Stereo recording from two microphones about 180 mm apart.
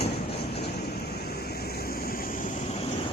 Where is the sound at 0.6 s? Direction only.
65° left (ahead or behind); by 2.8 s 45° left (ahead or behind).